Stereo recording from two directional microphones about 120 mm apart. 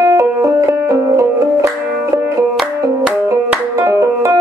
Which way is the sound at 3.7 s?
25° right (ahead or behind).